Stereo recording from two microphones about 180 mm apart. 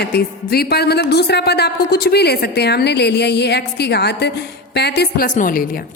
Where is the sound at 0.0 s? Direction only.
60° left (ahead or behind).